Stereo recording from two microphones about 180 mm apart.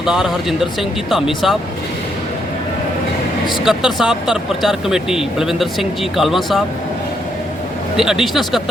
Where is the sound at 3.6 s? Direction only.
5° right (ahead or behind).